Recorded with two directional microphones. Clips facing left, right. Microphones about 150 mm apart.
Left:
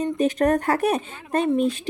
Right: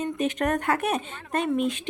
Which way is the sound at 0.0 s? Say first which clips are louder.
Left 5 dB; 35° left (ahead or behind).